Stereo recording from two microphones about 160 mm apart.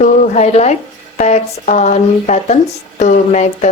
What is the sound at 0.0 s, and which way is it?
Speech, 45° left (ahead or behind).